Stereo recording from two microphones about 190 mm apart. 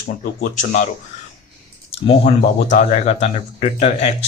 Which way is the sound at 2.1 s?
35° left (ahead or behind).